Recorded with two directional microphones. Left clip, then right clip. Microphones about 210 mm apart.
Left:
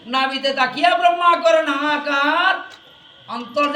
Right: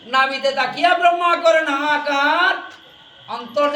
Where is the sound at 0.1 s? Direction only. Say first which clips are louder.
Right 2 dB; 20° right (ahead or behind).